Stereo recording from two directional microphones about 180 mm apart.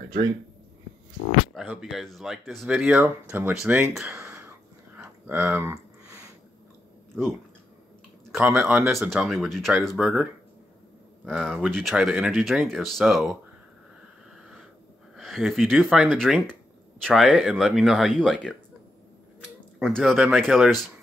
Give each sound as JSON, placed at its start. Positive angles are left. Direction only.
{"t": 1.7, "sound": "speech", "side_deg": -5}
{"t": 4.1, "sound": "a sound", "side_deg": -15}
{"t": 8.5, "sound": "speech", "side_deg": -15}
{"t": 11.2, "sound": "speech", "side_deg": 0}
{"t": 15.1, "sound": "speech", "side_deg": 0}
{"t": 19.8, "sound": "speech", "side_deg": 0}